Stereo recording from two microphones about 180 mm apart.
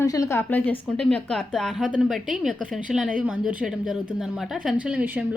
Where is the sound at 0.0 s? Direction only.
15° left (ahead or behind).